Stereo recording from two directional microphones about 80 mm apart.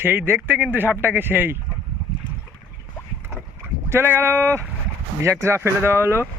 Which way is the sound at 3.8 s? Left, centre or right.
Right.